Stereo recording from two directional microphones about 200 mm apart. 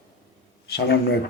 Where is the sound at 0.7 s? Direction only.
55° left (ahead or behind).